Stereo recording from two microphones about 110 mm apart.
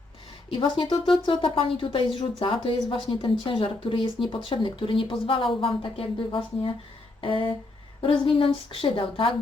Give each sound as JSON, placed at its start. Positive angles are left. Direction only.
{"t": 0.5, "sound": "speech", "side_deg": 45}